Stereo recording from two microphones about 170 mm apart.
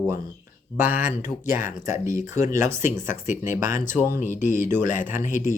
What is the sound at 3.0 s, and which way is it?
Speech, 50° left (ahead or behind).